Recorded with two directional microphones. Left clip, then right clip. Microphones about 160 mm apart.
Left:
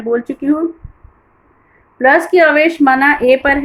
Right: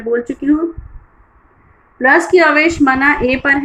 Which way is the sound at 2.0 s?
40° left (ahead or behind).